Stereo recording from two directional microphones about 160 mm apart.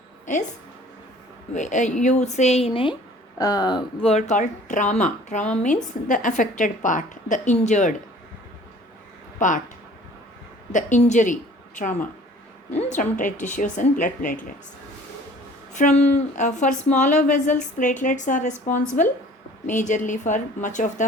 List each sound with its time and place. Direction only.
1.5 s a woman's voice: 50° left (ahead or behind)
3.3 s speech: 25° left (ahead or behind)
4.0 s a woman's voice: 45° left (ahead or behind)
9.4 s a woman's voice: 50° left (ahead or behind)
10.7 s a woman's voice: 50° left (ahead or behind)
15.7 s a woman's voice: 45° left (ahead or behind)